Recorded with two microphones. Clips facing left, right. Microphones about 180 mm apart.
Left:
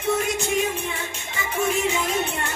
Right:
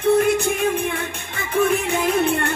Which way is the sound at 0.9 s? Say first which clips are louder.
Right 4 dB; 60° right (ahead or behind).